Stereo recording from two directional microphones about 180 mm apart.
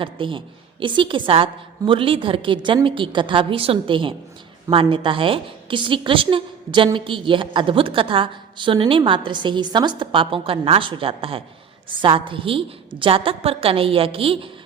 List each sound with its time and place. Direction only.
0.0 s a woman's voice: 30° right (ahead or behind)